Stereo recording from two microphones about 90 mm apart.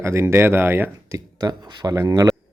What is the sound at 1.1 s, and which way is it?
Speech, 45° right (ahead or behind).